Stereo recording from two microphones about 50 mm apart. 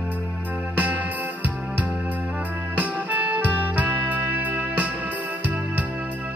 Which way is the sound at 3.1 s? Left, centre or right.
Right.